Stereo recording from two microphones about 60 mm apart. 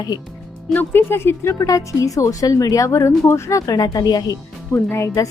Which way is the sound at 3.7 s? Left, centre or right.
Left.